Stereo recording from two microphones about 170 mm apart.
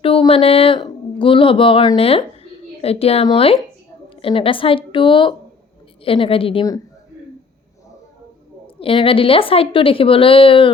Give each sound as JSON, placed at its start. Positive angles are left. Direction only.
{"t": 0.0, "sound": "a woman's voice", "side_deg": 35}
{"t": 8.6, "sound": "a woman's voice", "side_deg": 30}